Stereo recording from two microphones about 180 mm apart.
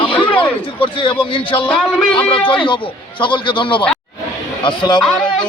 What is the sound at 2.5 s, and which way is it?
A man's voice, 30° left (ahead or behind).